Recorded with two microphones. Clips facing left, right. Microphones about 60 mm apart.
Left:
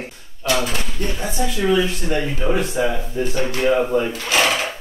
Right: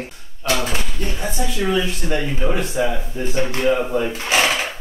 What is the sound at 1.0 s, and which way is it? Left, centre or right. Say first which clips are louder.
A man's voice: left 3 dB; centre.